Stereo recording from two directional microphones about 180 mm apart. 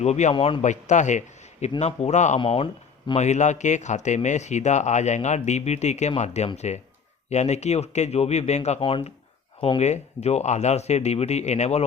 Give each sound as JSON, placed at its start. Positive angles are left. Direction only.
{"t": 0.0, "sound": "speech", "side_deg": 40}